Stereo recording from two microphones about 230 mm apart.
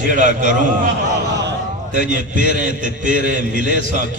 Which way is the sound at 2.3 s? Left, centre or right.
Right.